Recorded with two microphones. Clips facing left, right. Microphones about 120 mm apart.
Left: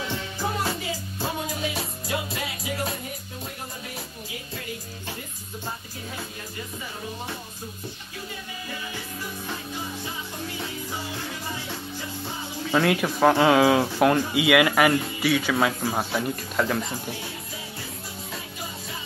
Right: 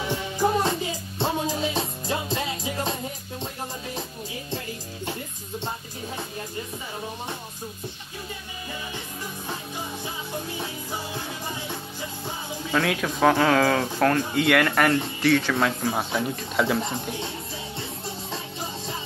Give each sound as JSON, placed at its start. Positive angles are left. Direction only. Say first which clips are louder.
{"t": 0.1, "sound": "music", "louder": "right 10 dB", "side_deg": -20}
{"t": 12.7, "sound": "speech", "louder": "left 3 dB", "side_deg": 10}
{"t": 16.8, "sound": "speech", "louder": "right 3 dB", "side_deg": -25}
{"t": 18.3, "sound": "music", "louder": "right 1 dB", "side_deg": -30}